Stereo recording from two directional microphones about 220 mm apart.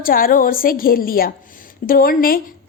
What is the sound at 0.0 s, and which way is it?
A woman's voice, 40° left (ahead or behind).